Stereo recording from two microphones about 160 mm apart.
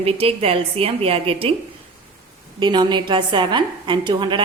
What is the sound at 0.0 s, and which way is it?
A woman's voice, 35° right (ahead or behind).